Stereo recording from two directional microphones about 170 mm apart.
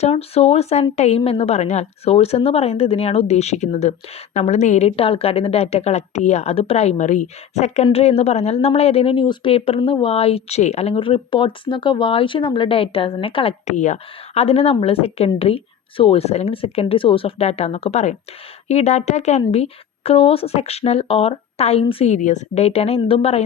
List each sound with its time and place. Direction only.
0.0 s speech: 35° left (ahead or behind)
13.7 s speech: 45° left (ahead or behind)